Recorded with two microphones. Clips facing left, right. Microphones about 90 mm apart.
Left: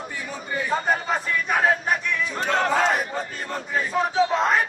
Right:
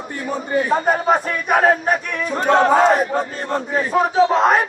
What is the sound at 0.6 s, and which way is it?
A man's voice, 60° right (ahead or behind).